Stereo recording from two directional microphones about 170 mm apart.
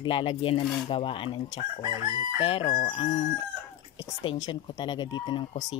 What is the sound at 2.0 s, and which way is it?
Chicken, 35° left (ahead or behind).